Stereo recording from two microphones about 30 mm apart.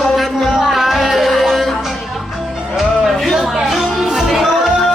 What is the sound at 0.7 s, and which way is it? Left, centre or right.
Music, centre.